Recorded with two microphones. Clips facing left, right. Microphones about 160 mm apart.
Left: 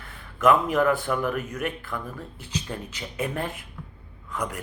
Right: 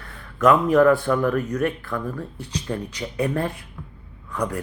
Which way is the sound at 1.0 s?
15° left (ahead or behind).